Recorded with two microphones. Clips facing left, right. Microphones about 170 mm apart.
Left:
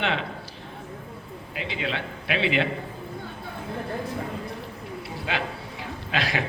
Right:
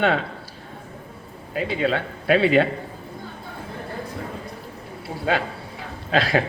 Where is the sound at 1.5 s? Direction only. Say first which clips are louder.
Right 8 dB; 45° right (ahead or behind).